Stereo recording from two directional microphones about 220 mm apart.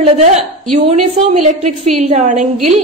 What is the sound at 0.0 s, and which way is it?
A woman's voice, 30° right (ahead or behind).